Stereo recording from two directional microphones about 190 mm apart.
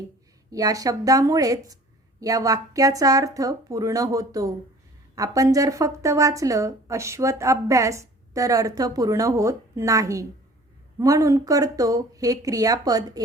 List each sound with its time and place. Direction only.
0.5 s speech: 20° right (ahead or behind)